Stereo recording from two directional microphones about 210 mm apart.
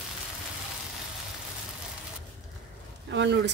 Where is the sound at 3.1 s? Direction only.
55° right (ahead or behind).